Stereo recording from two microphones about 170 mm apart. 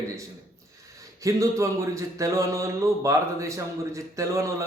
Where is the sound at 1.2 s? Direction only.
20° right (ahead or behind).